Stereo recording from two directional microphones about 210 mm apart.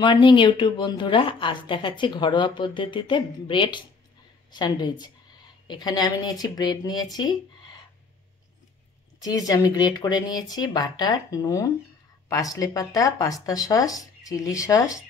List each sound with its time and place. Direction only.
0.0 s a woman's voice: 20° left (ahead or behind)
9.2 s speech: 15° left (ahead or behind)